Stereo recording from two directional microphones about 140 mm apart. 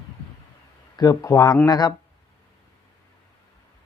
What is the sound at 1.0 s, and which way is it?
Speech, 25° left (ahead or behind).